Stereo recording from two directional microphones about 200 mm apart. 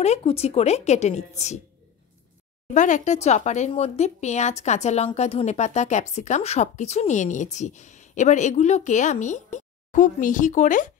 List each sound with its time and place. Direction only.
0.0 s speech: 30° left (ahead or behind)
2.7 s speech: 40° left (ahead or behind)